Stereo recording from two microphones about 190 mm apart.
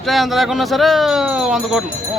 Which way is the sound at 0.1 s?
Centre (ahead or behind).